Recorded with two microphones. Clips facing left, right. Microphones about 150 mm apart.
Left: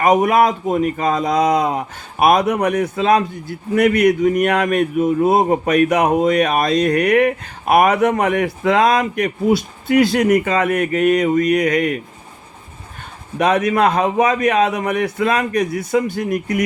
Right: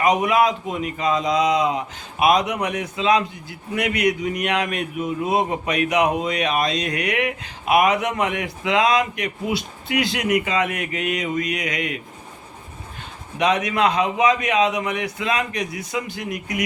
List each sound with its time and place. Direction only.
0.0 s a man's voice: 50° left (ahead or behind)
13.4 s a man's voice: 50° left (ahead or behind)